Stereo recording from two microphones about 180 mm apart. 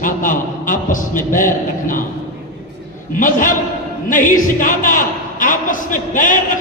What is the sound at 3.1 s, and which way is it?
A man's voice, 50° left (ahead or behind).